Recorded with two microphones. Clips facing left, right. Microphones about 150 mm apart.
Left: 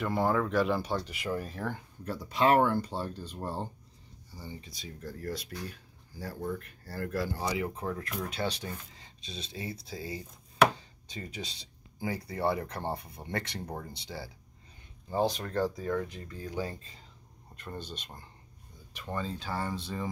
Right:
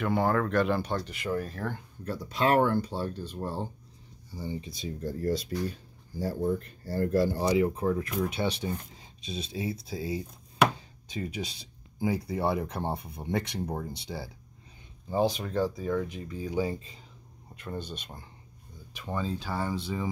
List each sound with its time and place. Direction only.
0.0 s speech: centre (ahead or behind)
4.4 s speech: 20° right (ahead or behind)
7.7 s speech: 10° right (ahead or behind)
11.1 s speech: 10° right (ahead or behind)
17.6 s speech: centre (ahead or behind)